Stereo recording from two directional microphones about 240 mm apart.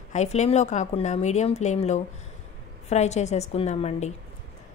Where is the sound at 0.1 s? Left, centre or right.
Left.